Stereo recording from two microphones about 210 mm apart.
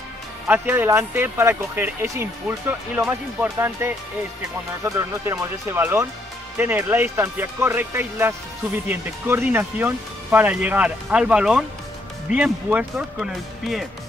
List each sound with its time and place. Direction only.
0.5 s speech: 10° right (ahead or behind)